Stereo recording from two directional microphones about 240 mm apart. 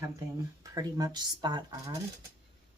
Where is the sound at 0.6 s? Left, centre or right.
Centre.